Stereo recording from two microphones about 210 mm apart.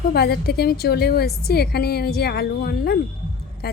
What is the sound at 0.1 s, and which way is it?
A woman's voice, 50° left (ahead or behind).